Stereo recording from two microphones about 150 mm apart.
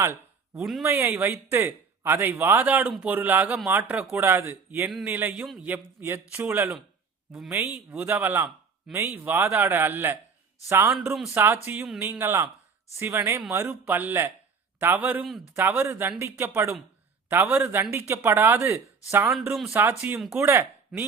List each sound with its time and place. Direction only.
0.5 s speech: centre (ahead or behind)
0.9 s speech: 15° right (ahead or behind)
7.9 s speech: 15° right (ahead or behind)
20.3 s speech: 15° right (ahead or behind)